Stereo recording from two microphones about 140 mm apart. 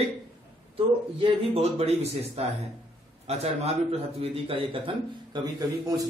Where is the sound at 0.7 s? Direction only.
45° right (ahead or behind).